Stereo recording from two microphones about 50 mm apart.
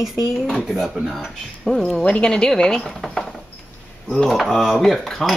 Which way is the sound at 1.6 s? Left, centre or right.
Centre.